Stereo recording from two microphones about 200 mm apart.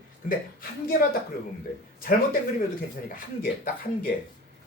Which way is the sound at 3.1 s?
45° left (ahead or behind).